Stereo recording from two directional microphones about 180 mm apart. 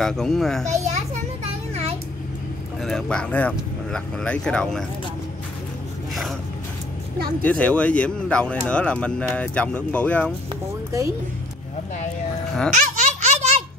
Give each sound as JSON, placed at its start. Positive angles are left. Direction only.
{"t": 0.0, "sound": "speech", "side_deg": 5}
{"t": 0.7, "sound": "children playing", "side_deg": -40}
{"t": 1.7, "sound": "a sound", "side_deg": -35}
{"t": 2.8, "sound": "speech", "side_deg": 0}
{"t": 7.4, "sound": "speech", "side_deg": 5}
{"t": 10.5, "sound": "music", "side_deg": -15}
{"t": 12.7, "sound": "baby laughter", "side_deg": -40}